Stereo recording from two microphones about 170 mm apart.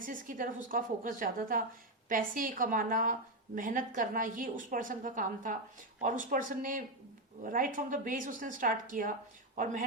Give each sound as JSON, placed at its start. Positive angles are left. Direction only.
{"t": 0.0, "sound": "a woman's voice", "side_deg": -50}